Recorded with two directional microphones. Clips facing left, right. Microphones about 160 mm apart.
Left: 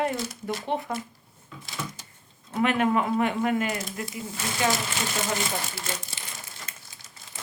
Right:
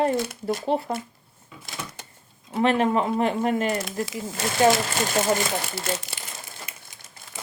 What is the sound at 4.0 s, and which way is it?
Speech, 90° right.